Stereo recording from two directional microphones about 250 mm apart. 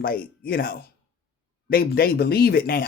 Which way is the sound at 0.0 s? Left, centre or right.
Left.